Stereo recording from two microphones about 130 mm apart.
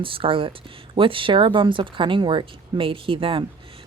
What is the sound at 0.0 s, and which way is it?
Speech, 45° right (ahead or behind).